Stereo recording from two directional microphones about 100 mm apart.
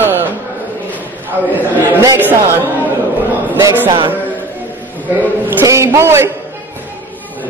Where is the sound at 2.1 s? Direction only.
20° right (ahead or behind).